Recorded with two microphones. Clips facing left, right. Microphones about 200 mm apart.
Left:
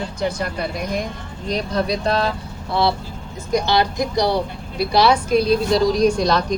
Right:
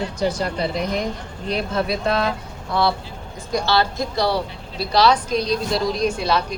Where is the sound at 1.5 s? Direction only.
40° left (ahead or behind).